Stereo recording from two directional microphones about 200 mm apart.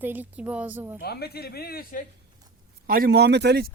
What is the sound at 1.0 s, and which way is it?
Speech, 50° left (ahead or behind).